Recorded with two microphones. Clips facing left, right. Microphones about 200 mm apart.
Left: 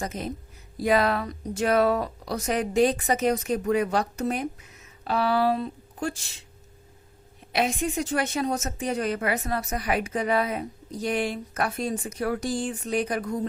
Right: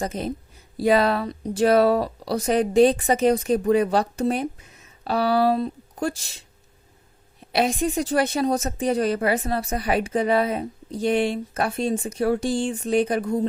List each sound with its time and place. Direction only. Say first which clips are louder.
0.0 s speech: right 4 dB; 30° right (ahead or behind)
7.5 s a woman's voice: right 4 dB; 35° right (ahead or behind)